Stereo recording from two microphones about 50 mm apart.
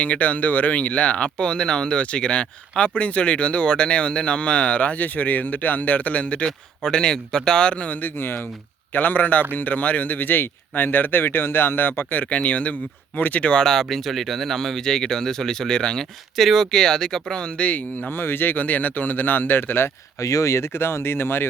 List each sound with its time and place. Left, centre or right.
0.0 s speech: left
6.8 s speech: centre
7.9 s speech: left
8.9 s speech: left
12.2 s speech: left
13.5 s speech: centre
13.8 s speech: centre
16.4 s speech: centre
17.4 s speech: left
18.1 s speech: left
20.1 s speech: left